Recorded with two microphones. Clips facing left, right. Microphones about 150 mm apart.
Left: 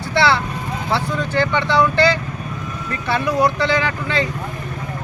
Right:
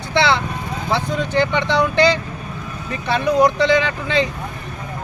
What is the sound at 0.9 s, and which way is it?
Speech, 20° right (ahead or behind).